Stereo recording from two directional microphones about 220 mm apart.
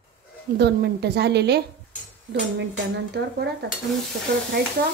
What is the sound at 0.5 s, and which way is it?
A woman's voice, 50° right (ahead or behind).